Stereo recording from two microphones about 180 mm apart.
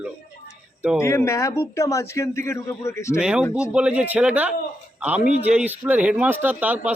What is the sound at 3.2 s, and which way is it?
Speech, 5° right (ahead or behind).